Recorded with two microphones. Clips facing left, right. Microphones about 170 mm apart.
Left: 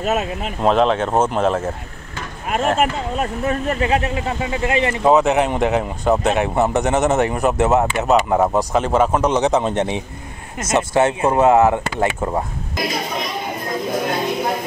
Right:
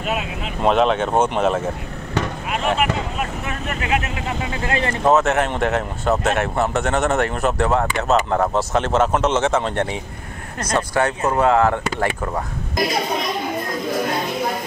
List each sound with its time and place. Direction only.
0.6 s speech: 5° right (ahead or behind)
2.8 s speech: 35° left (ahead or behind)
4.6 s speech: 20° left (ahead or behind)